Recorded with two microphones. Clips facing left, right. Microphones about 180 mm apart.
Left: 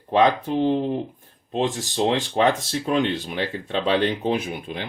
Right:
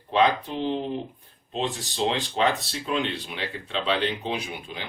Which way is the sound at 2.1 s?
50° left (ahead or behind).